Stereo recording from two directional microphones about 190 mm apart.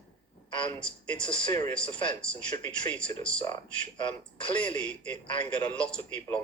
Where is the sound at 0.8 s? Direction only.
5° left (ahead or behind).